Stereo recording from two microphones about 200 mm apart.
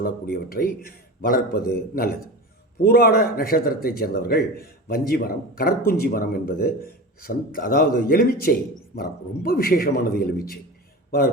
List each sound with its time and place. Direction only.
0.0 s a man's voice: 50° left (ahead or behind)